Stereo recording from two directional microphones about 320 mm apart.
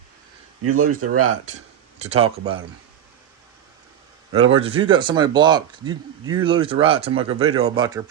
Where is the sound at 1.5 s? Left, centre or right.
Right.